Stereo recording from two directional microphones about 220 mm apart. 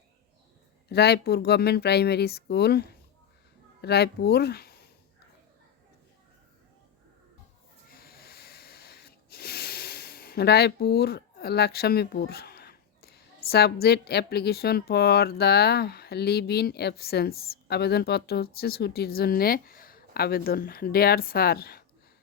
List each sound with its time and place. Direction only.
0.9 s speech: 50° left (ahead or behind)
7.9 s a sound: 45° left (ahead or behind)
18.6 s speech: 45° left (ahead or behind)